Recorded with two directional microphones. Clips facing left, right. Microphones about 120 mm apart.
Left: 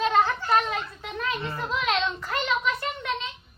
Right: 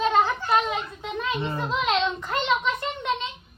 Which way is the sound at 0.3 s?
15° right (ahead or behind).